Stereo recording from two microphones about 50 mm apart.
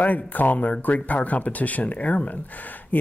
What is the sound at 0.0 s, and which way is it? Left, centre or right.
Speech, left.